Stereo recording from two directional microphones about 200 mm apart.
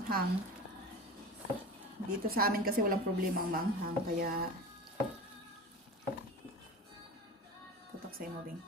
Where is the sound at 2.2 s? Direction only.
50° right (ahead or behind).